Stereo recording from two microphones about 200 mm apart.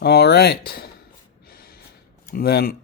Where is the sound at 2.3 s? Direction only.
50° left (ahead or behind).